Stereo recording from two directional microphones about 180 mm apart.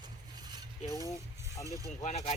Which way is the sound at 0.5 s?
20° right (ahead or behind).